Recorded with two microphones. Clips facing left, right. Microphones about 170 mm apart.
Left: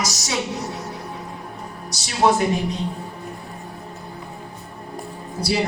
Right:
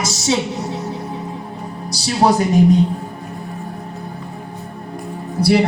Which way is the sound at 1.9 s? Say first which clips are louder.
Right 3 dB; 35° right (ahead or behind).